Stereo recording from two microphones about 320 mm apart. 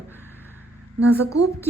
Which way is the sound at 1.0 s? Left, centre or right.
Centre.